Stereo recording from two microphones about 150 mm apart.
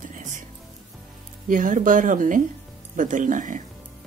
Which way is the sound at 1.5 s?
60° right (ahead or behind).